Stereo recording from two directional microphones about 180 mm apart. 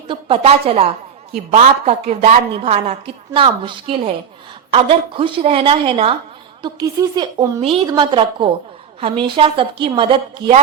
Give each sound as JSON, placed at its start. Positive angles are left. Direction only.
{"t": 0.1, "sound": "a woman's voice", "side_deg": -30}